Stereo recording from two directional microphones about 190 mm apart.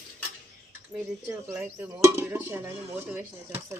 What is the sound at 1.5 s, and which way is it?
Speech, 10° right (ahead or behind).